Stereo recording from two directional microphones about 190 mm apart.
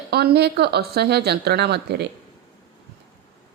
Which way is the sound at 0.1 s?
60° right (ahead or behind).